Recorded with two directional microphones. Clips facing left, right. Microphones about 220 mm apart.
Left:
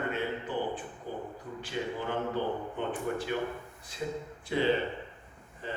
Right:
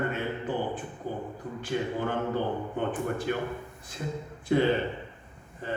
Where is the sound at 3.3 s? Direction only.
55° right (ahead or behind).